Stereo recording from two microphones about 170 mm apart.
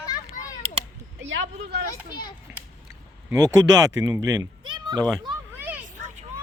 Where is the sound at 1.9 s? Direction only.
25° left (ahead or behind).